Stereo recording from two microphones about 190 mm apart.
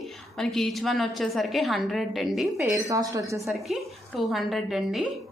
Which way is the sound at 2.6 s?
15° right (ahead or behind).